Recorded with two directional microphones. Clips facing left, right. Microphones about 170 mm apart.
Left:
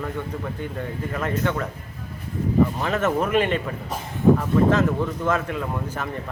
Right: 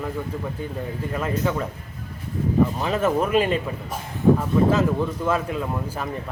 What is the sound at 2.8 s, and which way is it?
Speech, 10° right (ahead or behind).